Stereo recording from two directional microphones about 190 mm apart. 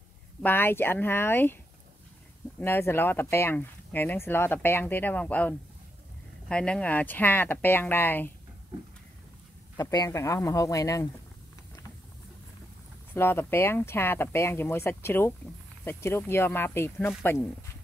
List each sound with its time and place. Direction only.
0.4 s speech: 10° left (ahead or behind)
2.6 s speech: 10° left (ahead or behind)
9.8 s speech: 15° left (ahead or behind)
13.1 s speech: 10° left (ahead or behind)